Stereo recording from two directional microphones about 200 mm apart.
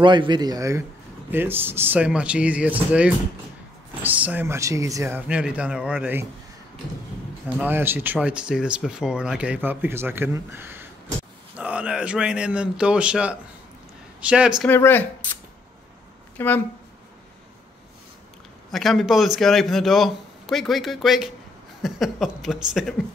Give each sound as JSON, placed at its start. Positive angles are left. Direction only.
{"t": 0.0, "sound": "speech", "side_deg": -25}
{"t": 7.4, "sound": "a man's voice", "side_deg": -10}
{"t": 14.6, "sound": "speech", "side_deg": 10}
{"t": 16.3, "sound": "speech", "side_deg": 10}
{"t": 18.7, "sound": "a man's voice", "side_deg": 0}